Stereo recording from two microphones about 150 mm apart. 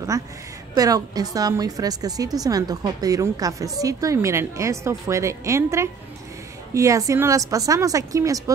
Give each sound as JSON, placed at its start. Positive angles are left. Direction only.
{"t": 0.7, "sound": "a woman's voice", "side_deg": -25}